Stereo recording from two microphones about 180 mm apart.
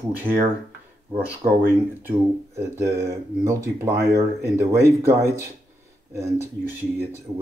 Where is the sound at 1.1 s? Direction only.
10° right (ahead or behind).